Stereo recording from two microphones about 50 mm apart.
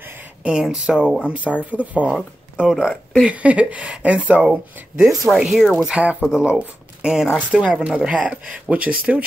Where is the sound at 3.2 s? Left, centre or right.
Right.